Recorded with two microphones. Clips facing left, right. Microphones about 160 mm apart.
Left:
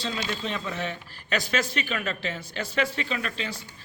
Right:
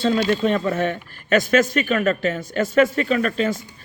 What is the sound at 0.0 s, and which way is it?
Speech, 50° right (ahead or behind).